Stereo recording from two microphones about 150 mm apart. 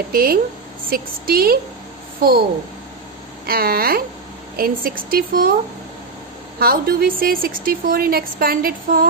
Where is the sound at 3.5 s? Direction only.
80° right.